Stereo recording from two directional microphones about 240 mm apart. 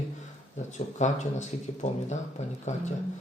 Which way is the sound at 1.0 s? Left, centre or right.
Left.